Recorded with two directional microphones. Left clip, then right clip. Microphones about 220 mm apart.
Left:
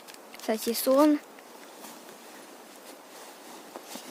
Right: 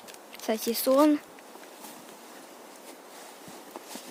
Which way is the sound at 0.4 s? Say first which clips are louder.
Even; centre (ahead or behind).